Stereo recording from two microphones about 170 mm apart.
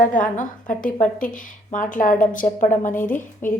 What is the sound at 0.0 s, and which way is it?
A woman's voice, 50° left (ahead or behind).